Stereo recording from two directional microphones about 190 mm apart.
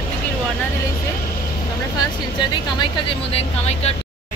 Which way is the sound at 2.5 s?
25° left (ahead or behind).